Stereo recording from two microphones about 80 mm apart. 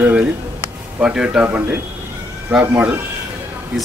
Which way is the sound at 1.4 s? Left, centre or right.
Right.